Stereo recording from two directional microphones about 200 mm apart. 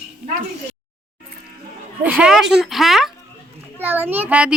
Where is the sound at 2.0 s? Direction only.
5° right (ahead or behind).